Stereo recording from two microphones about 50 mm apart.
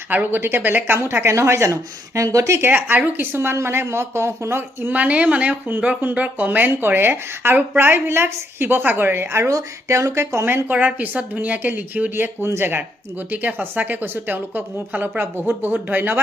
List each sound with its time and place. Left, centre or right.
0.1 s a woman's voice: right
1.2 s speech: right
2.6 s a woman's voice: right
3.4 s speech: right
4.9 s a woman's voice: right
6.7 s a woman's voice: right
10.4 s a woman's voice: right
10.8 s a woman's voice: right
12.1 s a woman's voice: right